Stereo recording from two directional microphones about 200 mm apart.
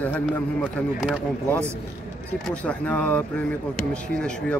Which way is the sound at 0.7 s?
Centre (ahead or behind).